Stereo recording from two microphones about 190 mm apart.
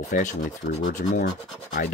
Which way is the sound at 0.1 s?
40° left (ahead or behind).